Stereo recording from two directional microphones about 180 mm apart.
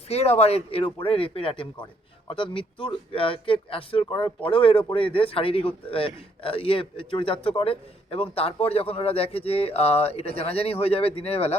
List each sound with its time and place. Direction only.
0.1 s a man's voice: 35° left (ahead or behind)